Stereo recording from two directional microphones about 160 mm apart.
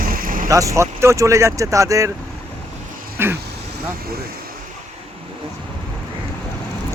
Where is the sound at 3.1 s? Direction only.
15° right (ahead or behind).